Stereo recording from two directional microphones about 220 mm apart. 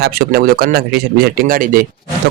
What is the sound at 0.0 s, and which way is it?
Speech, 45° right (ahead or behind).